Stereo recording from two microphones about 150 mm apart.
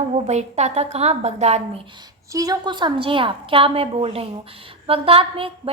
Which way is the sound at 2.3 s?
25° right (ahead or behind).